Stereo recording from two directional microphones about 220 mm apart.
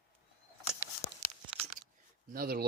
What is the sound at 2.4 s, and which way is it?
Speech, 45° right (ahead or behind).